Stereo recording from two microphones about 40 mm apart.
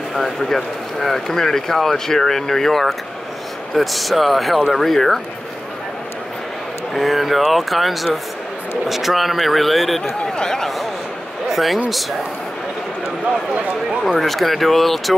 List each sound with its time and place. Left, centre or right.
0.1 s speech: centre
6.9 s speech: centre
10.2 s speech: centre
11.5 s speech: centre
14.1 s speech: centre